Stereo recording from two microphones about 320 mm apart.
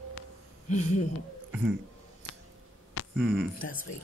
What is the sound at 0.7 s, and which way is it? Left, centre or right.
Speech, left.